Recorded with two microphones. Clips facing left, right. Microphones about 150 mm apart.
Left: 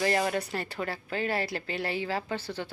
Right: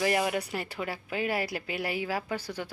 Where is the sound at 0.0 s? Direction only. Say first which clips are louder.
Even; 10° right (ahead or behind).